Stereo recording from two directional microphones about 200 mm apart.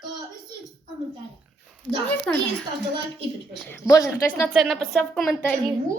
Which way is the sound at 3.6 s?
15° left (ahead or behind).